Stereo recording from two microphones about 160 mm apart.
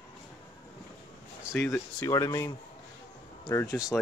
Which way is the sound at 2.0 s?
20° left (ahead or behind).